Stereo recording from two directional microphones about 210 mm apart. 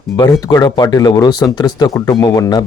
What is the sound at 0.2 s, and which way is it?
Speech, 20° left (ahead or behind).